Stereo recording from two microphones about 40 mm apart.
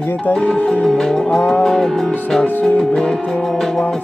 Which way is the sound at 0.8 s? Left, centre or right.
Centre.